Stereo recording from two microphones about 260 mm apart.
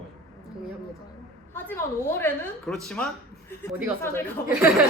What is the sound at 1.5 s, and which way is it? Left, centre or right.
A woman's voice, centre.